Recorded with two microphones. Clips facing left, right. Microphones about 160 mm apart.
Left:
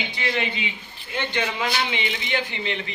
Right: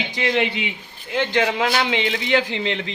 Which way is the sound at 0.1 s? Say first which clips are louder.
Right 8 dB; 85° right.